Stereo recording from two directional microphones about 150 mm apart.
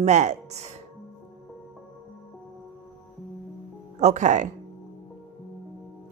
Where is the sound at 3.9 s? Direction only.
50° right (ahead or behind).